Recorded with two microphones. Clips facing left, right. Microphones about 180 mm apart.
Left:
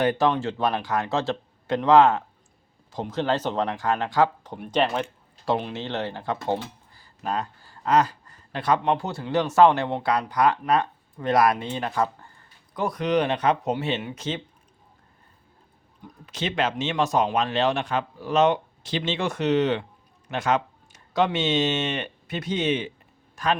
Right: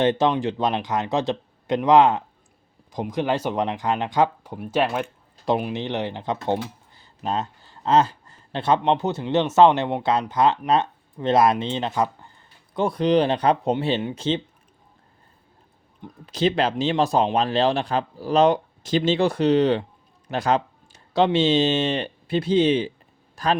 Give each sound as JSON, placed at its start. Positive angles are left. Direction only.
{"t": 0.0, "sound": "speech", "side_deg": -20}
{"t": 4.5, "sound": "speech", "side_deg": -5}
{"t": 16.2, "sound": "speech", "side_deg": -35}